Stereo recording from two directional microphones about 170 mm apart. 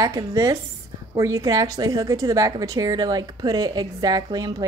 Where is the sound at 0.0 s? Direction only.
20° right (ahead or behind).